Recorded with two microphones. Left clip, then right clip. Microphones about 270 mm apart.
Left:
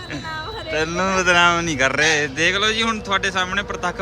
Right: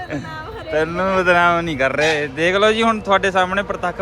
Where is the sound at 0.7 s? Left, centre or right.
Centre.